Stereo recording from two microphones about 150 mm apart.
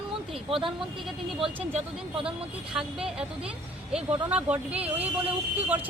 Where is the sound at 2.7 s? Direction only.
5° right (ahead or behind).